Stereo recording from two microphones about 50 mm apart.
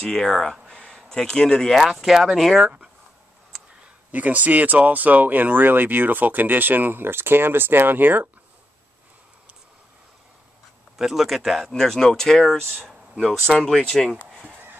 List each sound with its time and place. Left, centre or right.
0.0 s speech: centre
3.8 s speech: right
11.0 s speech: centre
13.8 s speech: centre